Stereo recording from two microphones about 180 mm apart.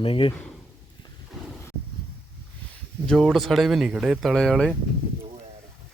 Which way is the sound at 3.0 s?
Centre (ahead or behind).